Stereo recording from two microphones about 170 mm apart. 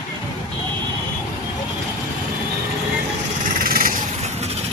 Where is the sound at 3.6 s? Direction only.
55° right (ahead or behind).